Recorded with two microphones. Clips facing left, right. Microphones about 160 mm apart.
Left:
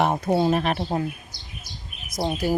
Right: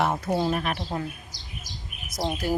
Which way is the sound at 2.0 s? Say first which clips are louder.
Left 3 dB; 10° left (ahead or behind).